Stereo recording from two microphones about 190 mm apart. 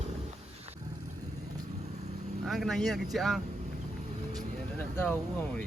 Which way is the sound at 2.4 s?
Centre (ahead or behind).